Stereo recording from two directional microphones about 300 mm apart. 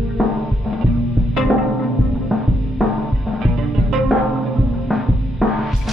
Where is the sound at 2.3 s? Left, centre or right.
Centre.